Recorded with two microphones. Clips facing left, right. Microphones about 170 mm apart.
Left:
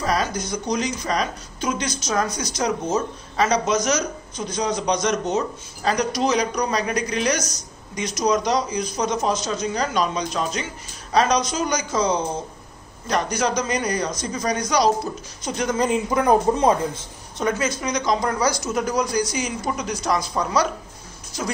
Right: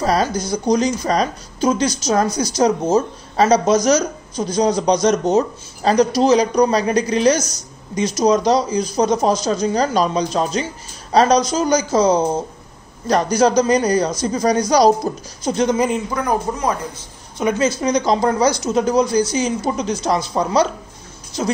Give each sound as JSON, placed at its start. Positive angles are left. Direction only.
{"t": 0.0, "sound": "speech", "side_deg": -35}
{"t": 16.1, "sound": "a man's voice", "side_deg": 20}
{"t": 17.6, "sound": "speech", "side_deg": -30}